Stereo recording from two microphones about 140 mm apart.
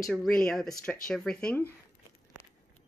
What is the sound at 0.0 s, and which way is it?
Speech, centre (ahead or behind).